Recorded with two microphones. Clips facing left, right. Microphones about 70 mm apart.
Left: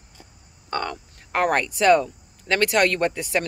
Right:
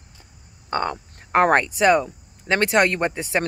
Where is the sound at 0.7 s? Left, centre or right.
Right.